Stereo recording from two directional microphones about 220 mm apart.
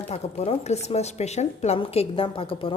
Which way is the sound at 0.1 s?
30° left (ahead or behind).